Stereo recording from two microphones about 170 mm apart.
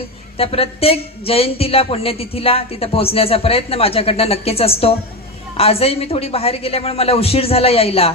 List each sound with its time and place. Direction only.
0.3 s speech: 35° left (ahead or behind)